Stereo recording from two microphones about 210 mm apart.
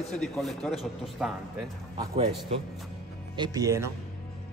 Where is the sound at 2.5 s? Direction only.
30° right (ahead or behind).